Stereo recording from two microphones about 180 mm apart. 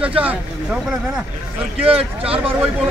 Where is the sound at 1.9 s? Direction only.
30° right (ahead or behind).